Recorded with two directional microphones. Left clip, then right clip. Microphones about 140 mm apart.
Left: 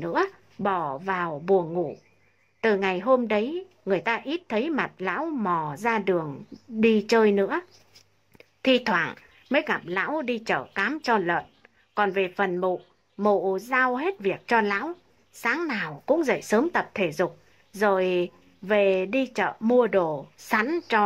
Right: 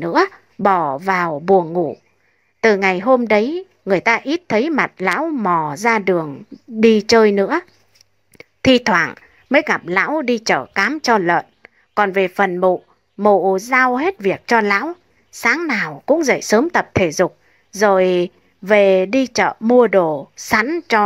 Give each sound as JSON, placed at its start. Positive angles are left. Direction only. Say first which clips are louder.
{"t": 0.0, "sound": "a woman's voice", "louder": "right 10 dB", "side_deg": -35}
{"t": 8.6, "sound": "a woman's voice", "louder": "right 9 dB", "side_deg": -35}